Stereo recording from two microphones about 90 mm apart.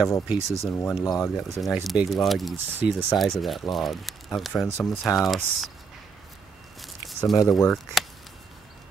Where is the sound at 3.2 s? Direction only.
Centre (ahead or behind).